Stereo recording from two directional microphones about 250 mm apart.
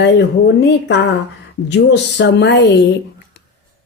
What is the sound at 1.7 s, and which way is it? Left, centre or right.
A woman's voice, left.